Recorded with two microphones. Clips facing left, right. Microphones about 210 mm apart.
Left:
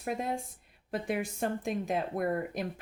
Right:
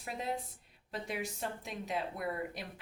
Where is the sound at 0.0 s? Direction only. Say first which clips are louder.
Left 5 dB; 50° left (ahead or behind).